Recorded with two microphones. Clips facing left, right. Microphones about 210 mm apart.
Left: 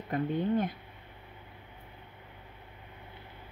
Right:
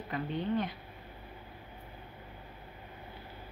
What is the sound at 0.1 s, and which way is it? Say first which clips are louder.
Speech: left 4 dB; 50° left (ahead or behind).